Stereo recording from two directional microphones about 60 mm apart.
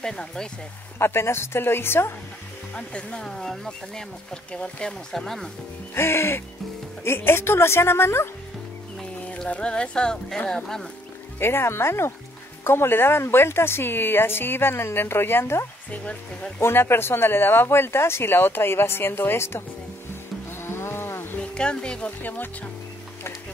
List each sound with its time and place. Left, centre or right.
0.0 s speech: centre
0.9 s speech: left
2.7 s speech: centre
5.1 s speech: centre
5.9 s speech: left
9.5 s speech: centre
11.3 s a woman's voice: left
15.9 s speech: left
16.6 s a woman's voice: left
20.6 s livestock: left
21.4 s speech: centre
22.2 s speech: left